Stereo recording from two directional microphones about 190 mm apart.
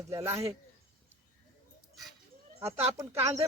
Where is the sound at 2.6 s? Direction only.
15° right (ahead or behind).